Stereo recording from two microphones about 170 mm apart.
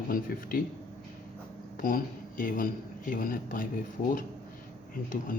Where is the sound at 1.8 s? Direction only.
55° left (ahead or behind).